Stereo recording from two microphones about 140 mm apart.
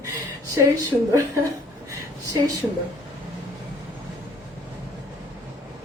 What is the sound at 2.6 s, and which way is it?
Speech, 10° right (ahead or behind).